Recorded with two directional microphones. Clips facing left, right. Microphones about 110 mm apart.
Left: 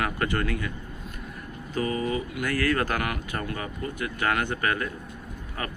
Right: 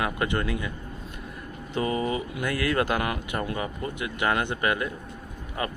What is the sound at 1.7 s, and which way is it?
Speech, 25° right (ahead or behind).